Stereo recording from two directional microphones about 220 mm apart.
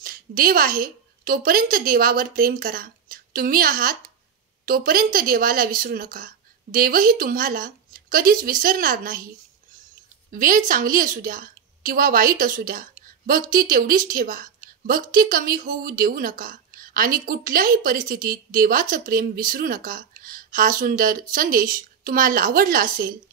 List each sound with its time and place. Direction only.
0.0 s a woman's voice: 40° right (ahead or behind)
10.3 s a woman's voice: 40° right (ahead or behind)